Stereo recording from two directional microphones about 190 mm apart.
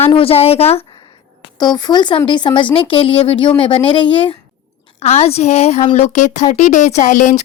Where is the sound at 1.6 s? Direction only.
20° left (ahead or behind).